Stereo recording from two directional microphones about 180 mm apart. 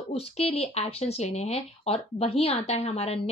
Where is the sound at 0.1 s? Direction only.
35° left (ahead or behind).